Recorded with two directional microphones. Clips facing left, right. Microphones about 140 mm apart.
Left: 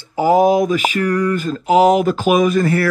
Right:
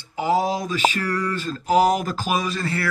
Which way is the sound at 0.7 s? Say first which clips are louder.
Left 4 dB; 30° right (ahead or behind).